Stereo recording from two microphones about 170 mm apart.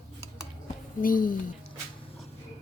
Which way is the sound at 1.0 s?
55° left (ahead or behind).